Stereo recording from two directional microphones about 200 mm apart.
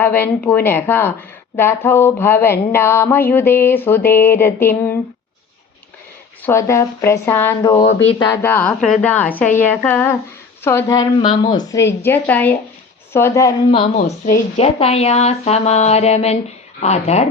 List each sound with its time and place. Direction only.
0.0 s speech: 10° left (ahead or behind)
6.4 s speech: 15° left (ahead or behind)
13.9 s a woman's voice: 45° left (ahead or behind)
14.5 s speech: 30° left (ahead or behind)